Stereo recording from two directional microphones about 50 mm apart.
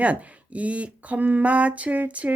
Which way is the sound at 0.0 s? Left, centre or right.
Right.